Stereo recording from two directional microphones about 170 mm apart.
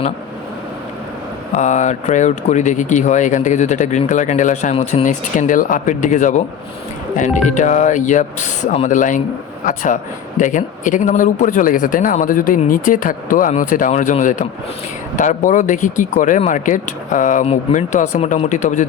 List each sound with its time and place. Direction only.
1.5 s speech: 45° left (ahead or behind)